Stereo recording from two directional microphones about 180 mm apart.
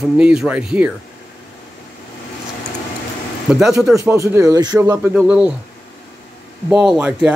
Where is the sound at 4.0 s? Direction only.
15° right (ahead or behind).